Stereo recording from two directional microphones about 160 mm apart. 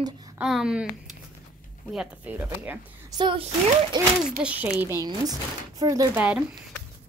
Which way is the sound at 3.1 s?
30° right (ahead or behind).